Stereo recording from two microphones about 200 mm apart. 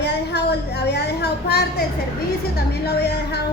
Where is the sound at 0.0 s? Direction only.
55° left (ahead or behind).